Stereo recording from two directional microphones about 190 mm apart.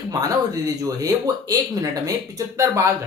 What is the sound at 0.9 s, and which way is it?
Speech, 20° right (ahead or behind).